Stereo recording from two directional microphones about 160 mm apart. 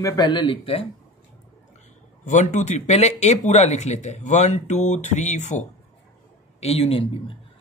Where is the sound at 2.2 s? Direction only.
50° left (ahead or behind).